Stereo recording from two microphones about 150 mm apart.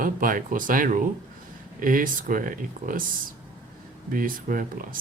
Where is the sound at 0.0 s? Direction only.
65° right (ahead or behind).